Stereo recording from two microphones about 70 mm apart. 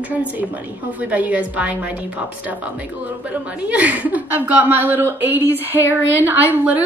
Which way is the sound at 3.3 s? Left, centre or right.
Right.